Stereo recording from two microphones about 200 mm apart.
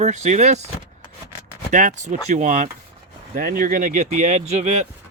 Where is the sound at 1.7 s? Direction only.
40° right (ahead or behind).